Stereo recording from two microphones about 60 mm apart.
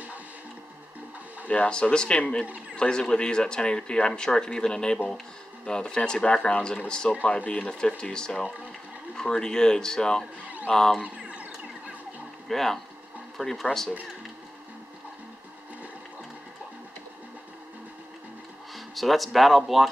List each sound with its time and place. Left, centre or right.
1.5 s speech: centre
11.0 s a sound: right
12.4 s speech: centre
18.9 s speech: centre